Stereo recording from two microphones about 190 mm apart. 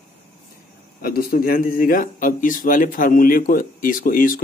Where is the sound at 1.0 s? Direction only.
50° left (ahead or behind).